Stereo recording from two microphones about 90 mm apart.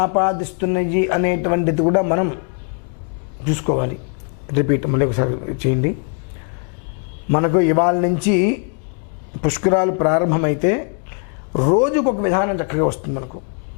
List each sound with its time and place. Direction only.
0.0 s speech: 20° left (ahead or behind)
3.4 s speech: 15° left (ahead or behind)
7.3 s speech: 15° left (ahead or behind)